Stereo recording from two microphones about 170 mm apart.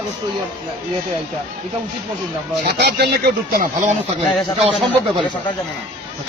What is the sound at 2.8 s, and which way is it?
Speech, 75° right (ahead or behind).